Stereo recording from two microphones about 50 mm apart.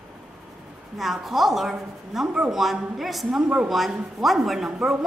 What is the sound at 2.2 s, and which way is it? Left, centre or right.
Speech, centre.